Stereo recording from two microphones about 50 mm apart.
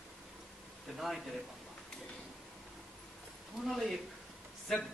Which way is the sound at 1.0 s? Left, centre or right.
Centre.